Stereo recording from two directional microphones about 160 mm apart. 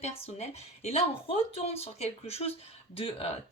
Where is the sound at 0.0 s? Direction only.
40° left (ahead or behind).